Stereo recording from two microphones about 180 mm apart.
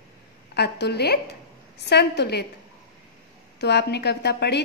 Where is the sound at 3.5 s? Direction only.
70° left (ahead or behind).